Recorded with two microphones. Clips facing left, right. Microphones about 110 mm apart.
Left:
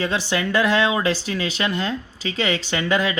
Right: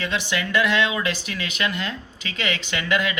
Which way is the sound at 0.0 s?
35° left (ahead or behind).